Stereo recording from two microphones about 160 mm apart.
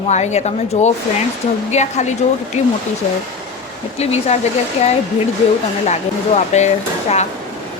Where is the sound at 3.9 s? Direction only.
40° left (ahead or behind).